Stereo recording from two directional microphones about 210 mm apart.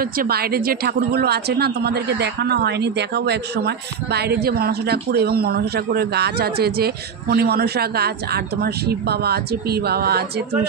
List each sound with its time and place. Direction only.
0.0 s a woman's voice: 45° right (ahead or behind)